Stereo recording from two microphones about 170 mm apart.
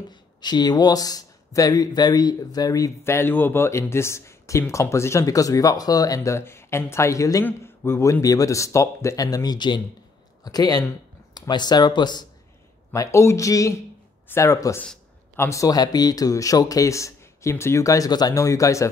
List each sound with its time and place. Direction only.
0.1 s speech: 25° left (ahead or behind)